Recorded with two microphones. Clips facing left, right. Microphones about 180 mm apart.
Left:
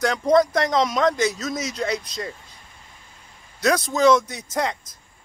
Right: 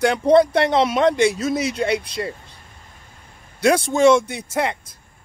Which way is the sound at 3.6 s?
30° right (ahead or behind).